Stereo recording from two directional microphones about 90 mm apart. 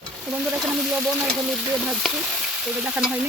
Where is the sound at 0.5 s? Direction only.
15° right (ahead or behind).